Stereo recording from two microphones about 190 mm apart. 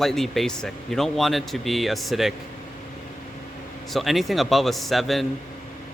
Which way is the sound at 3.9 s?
Centre (ahead or behind).